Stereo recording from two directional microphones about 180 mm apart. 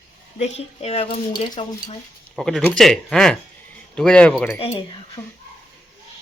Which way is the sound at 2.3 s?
Centre (ahead or behind).